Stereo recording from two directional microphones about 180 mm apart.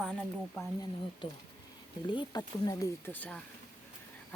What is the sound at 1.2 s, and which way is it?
Speech, 30° left (ahead or behind).